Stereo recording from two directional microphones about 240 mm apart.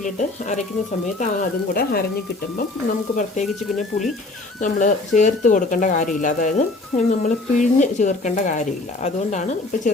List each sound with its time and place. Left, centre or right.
0.0 s speech: left
3.4 s speech: centre
4.6 s speech: left